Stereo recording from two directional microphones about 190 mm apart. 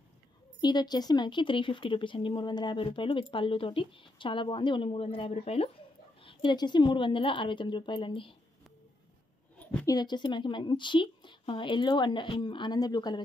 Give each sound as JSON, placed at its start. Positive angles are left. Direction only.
{"t": 0.6, "sound": "speech", "side_deg": 20}
{"t": 9.6, "sound": "a sound", "side_deg": 10}
{"t": 9.9, "sound": "speech", "side_deg": 25}